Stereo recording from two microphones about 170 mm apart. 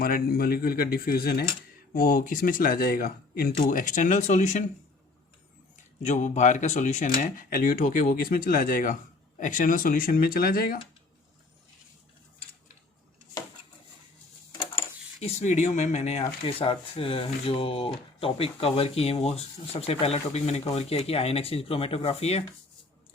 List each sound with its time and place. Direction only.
0.0 s speech: 60° left (ahead or behind)
3.7 s speech: 50° left (ahead or behind)
6.0 s speech: 45° left (ahead or behind); by 10.8 s 60° left (ahead or behind)
15.2 s speech: 40° left (ahead or behind)